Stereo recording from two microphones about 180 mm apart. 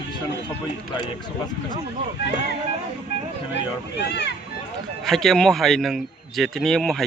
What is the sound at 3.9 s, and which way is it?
Speech, 70° left (ahead or behind).